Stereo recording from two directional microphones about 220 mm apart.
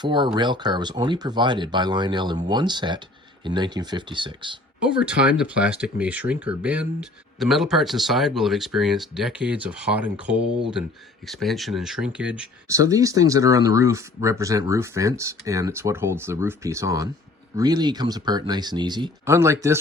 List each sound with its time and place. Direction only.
0.0 s speech: 20° right (ahead or behind)
4.8 s speech: 5° right (ahead or behind)